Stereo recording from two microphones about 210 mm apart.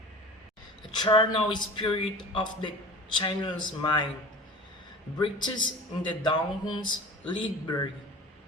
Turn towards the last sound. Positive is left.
turn(degrees=20)  # may be behind; listen again after turning